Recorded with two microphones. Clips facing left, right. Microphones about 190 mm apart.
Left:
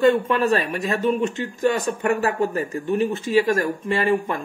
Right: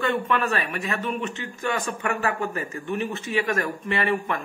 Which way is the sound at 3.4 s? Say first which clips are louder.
Left 5 dB; 25° left (ahead or behind).